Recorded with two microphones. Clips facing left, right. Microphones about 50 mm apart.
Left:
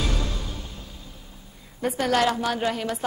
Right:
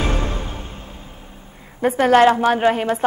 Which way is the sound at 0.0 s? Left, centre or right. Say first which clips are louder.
Right 6 dB; right.